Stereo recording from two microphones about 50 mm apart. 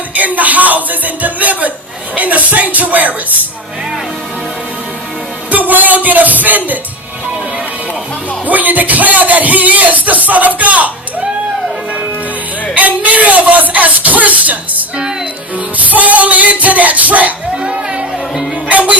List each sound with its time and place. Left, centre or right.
0.1 s a man's voice: right
5.5 s music: right
8.4 s a man's voice: right
12.7 s a man's voice: right
17.5 s music: centre
18.7 s music: right